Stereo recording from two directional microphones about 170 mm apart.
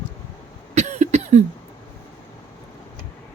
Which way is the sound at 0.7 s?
40° right (ahead or behind).